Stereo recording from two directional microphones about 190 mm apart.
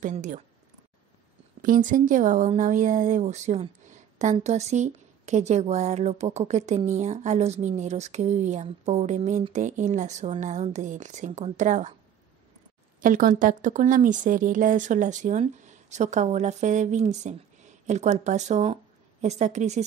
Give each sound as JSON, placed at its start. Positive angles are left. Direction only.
{"t": 0.0, "sound": "speech", "side_deg": -40}
{"t": 1.6, "sound": "speech", "side_deg": -45}
{"t": 13.0, "sound": "speech", "side_deg": -45}